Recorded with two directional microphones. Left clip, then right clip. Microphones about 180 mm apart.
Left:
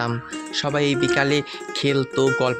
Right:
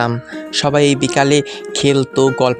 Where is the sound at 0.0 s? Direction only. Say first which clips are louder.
Right 7 dB; 45° right (ahead or behind).